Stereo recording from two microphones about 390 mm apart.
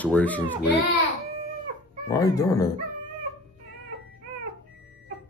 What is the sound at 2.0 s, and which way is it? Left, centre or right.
Speech, centre.